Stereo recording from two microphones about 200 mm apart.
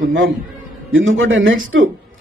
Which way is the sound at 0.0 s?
65° right (ahead or behind).